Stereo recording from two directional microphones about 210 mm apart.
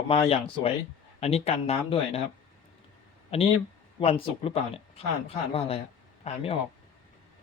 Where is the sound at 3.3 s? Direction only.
30° left (ahead or behind).